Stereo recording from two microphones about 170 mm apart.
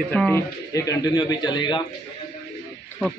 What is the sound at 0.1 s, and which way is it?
Speech, 10° left (ahead or behind).